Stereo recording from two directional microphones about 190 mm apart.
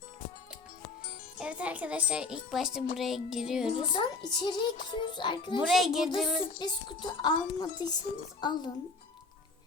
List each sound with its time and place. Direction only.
1.4 s a child's voice: 5° right (ahead or behind)
3.0 s music: centre (ahead or behind)
3.7 s speech: 25° left (ahead or behind)
5.7 s music: centre (ahead or behind)
6.6 s speech: 25° left (ahead or behind)